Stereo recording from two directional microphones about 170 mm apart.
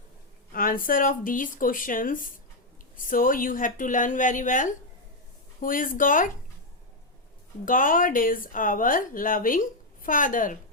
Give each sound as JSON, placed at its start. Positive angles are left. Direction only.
{"t": 0.5, "sound": "speech", "side_deg": 55}
{"t": 7.6, "sound": "speech", "side_deg": 55}